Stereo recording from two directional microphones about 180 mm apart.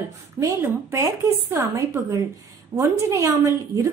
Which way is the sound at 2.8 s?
20° right (ahead or behind).